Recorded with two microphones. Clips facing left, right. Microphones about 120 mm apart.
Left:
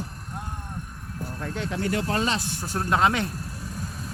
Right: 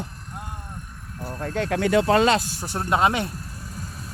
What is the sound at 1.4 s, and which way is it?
Speech, 50° right (ahead or behind).